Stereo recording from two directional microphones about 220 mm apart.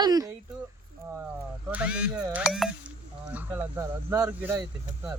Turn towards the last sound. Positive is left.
turn(degrees=-10)  # may be behind; listen again after turning